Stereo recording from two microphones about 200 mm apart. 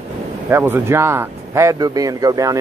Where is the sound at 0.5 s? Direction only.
10° right (ahead or behind).